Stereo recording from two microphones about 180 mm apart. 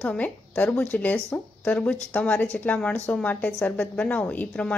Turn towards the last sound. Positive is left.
turn(degrees=10)  # may be behind; listen again after turning